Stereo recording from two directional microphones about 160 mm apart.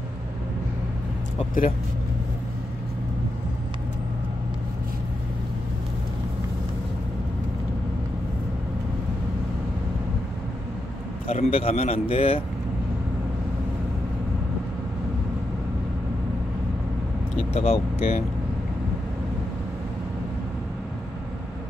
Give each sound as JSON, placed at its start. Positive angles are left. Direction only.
{"t": 11.2, "sound": "a man's voice", "side_deg": 40}
{"t": 17.6, "sound": "a man's voice", "side_deg": 40}